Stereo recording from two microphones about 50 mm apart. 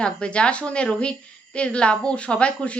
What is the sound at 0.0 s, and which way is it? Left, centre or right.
Speech, left.